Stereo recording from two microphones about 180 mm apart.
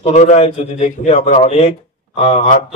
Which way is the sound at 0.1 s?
40° left (ahead or behind).